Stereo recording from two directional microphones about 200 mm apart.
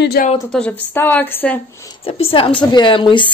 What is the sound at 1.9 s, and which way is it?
A woman's voice, 30° left (ahead or behind).